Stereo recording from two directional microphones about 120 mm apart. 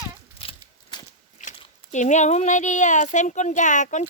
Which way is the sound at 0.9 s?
35° left (ahead or behind).